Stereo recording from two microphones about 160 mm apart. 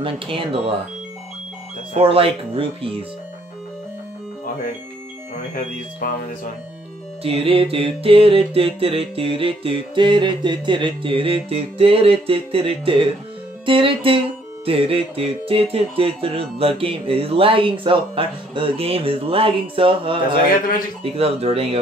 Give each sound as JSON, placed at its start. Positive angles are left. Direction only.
{"t": 0.0, "sound": "music", "side_deg": -35}
{"t": 2.0, "sound": "music", "side_deg": -35}
{"t": 6.0, "sound": "speech", "side_deg": 65}
{"t": 7.2, "sound": "music", "side_deg": -35}